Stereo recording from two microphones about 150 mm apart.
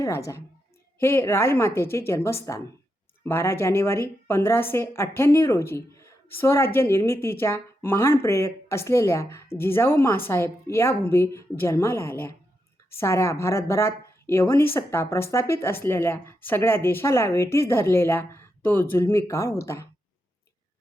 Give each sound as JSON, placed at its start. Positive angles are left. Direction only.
{"t": 0.0, "sound": "a woman's voice", "side_deg": 20}